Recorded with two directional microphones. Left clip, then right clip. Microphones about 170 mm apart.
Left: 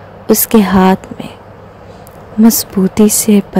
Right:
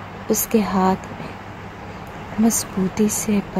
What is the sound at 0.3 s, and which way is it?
Speech, 70° left (ahead or behind).